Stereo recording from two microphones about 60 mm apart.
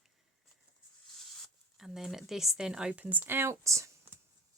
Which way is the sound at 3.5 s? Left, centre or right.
Right.